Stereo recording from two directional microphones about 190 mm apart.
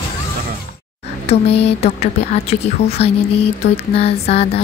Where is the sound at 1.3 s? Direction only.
30° left (ahead or behind).